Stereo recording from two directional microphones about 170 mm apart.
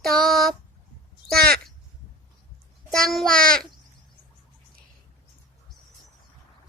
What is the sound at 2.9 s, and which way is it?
Speech, centre (ahead or behind).